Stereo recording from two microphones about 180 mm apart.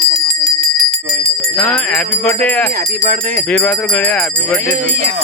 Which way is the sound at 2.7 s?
55° right (ahead or behind).